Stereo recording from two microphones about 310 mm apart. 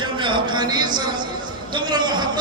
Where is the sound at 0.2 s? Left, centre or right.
Centre.